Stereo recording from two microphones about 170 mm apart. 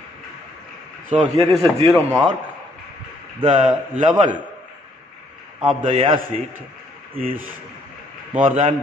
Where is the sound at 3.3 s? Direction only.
40° right (ahead or behind).